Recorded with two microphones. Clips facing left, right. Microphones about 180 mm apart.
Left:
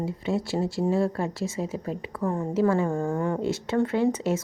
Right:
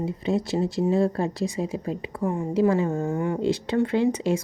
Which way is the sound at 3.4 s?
20° right (ahead or behind).